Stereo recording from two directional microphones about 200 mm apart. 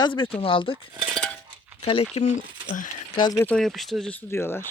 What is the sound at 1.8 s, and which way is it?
Speech, 30° left (ahead or behind).